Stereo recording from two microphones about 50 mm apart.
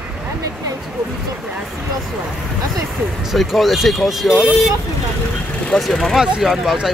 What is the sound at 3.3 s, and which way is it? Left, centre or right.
Speech, centre.